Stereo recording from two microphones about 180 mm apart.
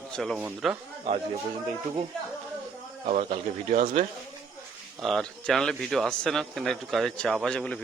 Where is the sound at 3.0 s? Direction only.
40° right (ahead or behind).